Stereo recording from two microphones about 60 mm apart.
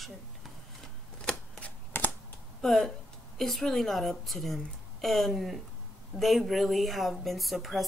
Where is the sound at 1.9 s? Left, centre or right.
Left.